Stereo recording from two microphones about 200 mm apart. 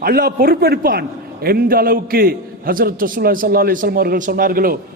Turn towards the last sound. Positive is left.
turn(degrees=-45)  # may be behind; listen again after turning